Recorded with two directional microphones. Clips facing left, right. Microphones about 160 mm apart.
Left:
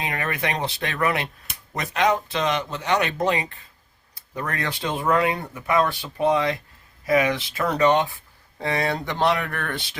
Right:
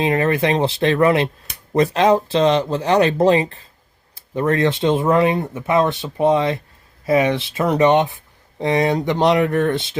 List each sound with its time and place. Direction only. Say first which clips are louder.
0.0 s speech: right 10 dB; 25° right (ahead or behind)